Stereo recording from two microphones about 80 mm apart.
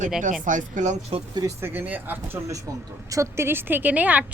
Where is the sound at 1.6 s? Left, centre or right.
Right.